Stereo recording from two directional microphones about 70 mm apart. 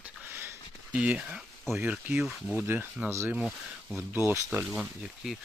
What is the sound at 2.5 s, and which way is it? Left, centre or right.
Speech, right.